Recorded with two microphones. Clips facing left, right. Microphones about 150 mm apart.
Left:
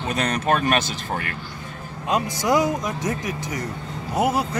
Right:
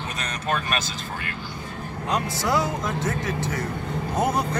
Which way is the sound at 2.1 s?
15° left (ahead or behind).